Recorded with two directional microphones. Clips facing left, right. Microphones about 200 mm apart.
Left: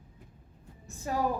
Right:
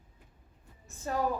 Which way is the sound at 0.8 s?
15° left (ahead or behind).